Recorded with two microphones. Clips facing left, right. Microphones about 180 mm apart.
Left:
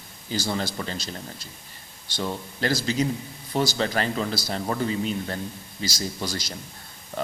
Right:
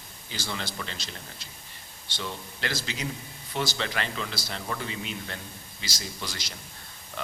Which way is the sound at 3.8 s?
40° left (ahead or behind).